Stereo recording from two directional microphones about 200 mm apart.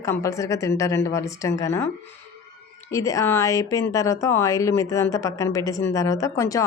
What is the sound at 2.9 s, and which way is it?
Speech, 15° left (ahead or behind).